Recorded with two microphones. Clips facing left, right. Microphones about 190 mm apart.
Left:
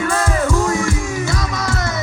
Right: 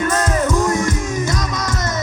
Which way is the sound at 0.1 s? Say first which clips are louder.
Even; 20° right (ahead or behind).